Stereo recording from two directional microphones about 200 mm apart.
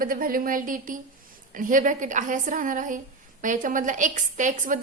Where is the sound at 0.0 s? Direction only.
45° right (ahead or behind).